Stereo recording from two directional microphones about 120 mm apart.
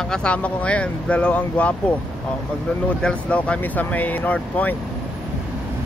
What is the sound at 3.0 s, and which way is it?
Speech, 10° left (ahead or behind).